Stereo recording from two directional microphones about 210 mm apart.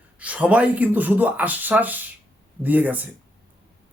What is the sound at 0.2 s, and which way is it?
Speech, 5° right (ahead or behind).